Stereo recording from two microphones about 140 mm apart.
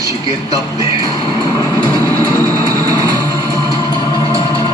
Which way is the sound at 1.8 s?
20° right (ahead or behind).